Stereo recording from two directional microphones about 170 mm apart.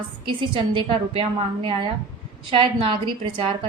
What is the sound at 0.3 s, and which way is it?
Speech, 30° right (ahead or behind).